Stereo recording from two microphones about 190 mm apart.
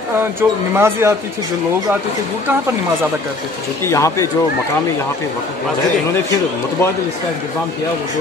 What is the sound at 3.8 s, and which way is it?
Speech, 15° left (ahead or behind).